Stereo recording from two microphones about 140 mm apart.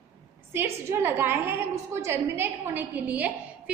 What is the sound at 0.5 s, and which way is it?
A woman's voice, 15° right (ahead or behind).